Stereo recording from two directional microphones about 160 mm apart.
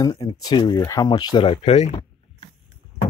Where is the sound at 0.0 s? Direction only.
25° left (ahead or behind); by 2.0 s 40° left (ahead or behind).